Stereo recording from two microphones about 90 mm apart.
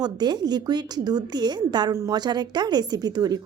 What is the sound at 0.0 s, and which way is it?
Speech, 50° right (ahead or behind).